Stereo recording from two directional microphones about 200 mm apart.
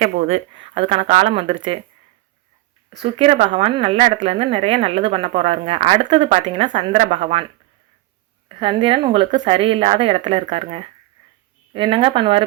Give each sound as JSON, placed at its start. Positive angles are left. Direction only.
{"t": 0.0, "sound": "speech", "side_deg": -30}
{"t": 3.0, "sound": "speech", "side_deg": -30}
{"t": 8.5, "sound": "speech", "side_deg": -25}